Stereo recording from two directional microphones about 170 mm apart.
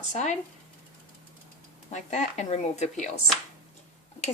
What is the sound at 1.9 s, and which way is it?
Speech, 40° left (ahead or behind).